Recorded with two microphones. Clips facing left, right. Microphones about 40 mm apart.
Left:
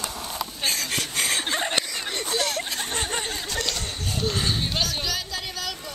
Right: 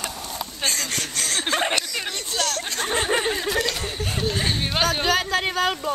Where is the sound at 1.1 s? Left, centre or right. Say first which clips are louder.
Right 2 dB; centre.